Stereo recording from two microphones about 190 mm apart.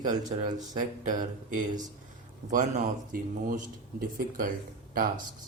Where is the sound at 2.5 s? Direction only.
40° right (ahead or behind).